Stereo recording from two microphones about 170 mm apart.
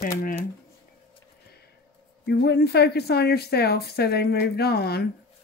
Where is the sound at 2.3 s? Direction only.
75° left (ahead or behind).